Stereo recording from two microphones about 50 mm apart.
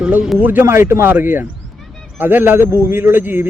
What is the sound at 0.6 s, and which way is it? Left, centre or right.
A man's voice, right.